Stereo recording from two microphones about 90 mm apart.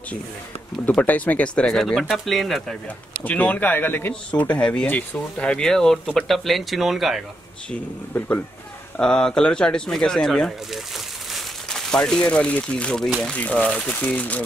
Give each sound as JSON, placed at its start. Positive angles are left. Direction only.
{"t": 0.8, "sound": "speech", "side_deg": 15}
{"t": 3.3, "sound": "speech", "side_deg": 20}
{"t": 8.9, "sound": "speech", "side_deg": 10}